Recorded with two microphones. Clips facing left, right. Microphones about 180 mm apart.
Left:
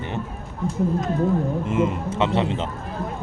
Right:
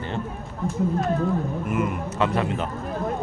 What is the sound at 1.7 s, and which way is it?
Speech, 25° left (ahead or behind).